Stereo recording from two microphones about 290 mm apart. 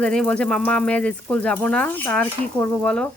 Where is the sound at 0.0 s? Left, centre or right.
Centre.